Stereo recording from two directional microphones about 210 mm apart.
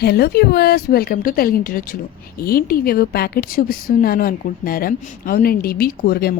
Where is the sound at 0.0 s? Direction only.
50° left (ahead or behind).